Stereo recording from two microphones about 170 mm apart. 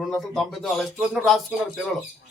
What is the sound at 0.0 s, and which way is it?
A man's voice, centre (ahead or behind).